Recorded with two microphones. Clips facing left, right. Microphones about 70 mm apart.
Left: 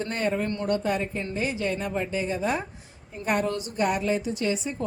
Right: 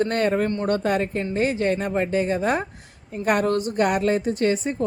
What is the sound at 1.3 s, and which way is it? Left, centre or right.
A woman's voice, right.